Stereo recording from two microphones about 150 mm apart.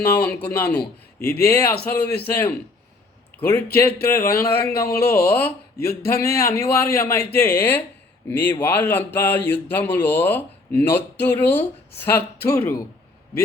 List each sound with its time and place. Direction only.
0.0 s speech: 10° left (ahead or behind)
4.7 s speech: 85° left
5.3 s speech: 10° left (ahead or behind)
5.7 s a sound: 90° left
6.6 s speech: 15° left (ahead or behind)